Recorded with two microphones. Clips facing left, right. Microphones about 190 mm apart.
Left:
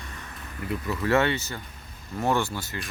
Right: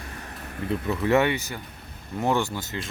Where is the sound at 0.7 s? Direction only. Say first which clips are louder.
Right 2 dB; 20° right (ahead or behind).